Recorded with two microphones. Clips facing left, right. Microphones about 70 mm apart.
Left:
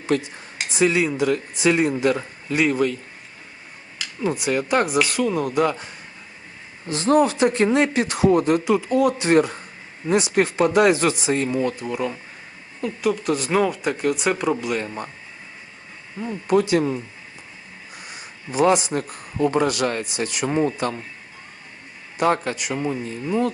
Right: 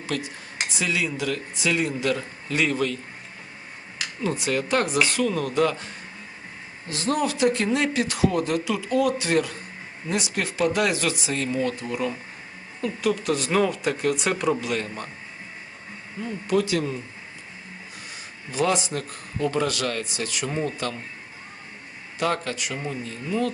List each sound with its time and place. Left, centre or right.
0.1 s speech: left
2.5 s speech: centre
4.4 s speech: centre
6.8 s speech: left
11.8 s speech: centre
14.8 s speech: centre
16.2 s speech: left
18.1 s a sound: left
18.9 s speech: left
22.2 s speech: left